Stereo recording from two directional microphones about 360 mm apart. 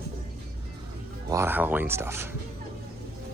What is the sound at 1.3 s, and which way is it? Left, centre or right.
Speech, centre.